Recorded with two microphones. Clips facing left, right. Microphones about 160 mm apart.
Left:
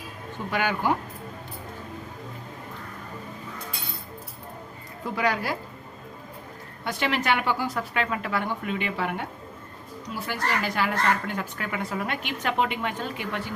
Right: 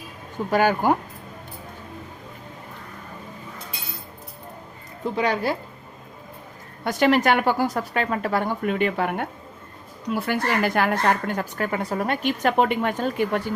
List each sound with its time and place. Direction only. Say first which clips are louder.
0.5 s speech: right 6 dB; 40° right (ahead or behind)
5.1 s speech: right 3 dB; 25° right (ahead or behind)
6.8 s speech: right 7 dB; 45° right (ahead or behind)